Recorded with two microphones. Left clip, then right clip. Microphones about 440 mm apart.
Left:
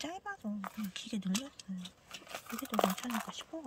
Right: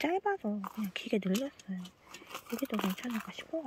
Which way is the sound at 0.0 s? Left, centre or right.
Centre.